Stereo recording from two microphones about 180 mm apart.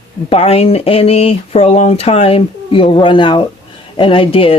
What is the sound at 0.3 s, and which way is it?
Speech, 35° left (ahead or behind).